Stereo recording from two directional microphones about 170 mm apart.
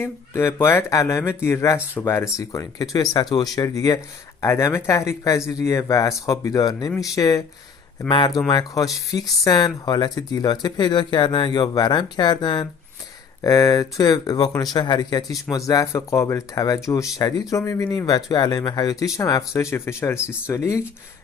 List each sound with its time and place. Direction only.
0.0 s speech: 15° left (ahead or behind)